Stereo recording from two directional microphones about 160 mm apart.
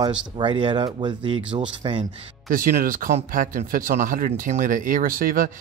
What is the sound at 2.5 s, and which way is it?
Speech, 60° right (ahead or behind).